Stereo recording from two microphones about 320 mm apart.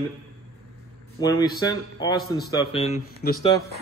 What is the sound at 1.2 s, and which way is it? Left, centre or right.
Speech, centre.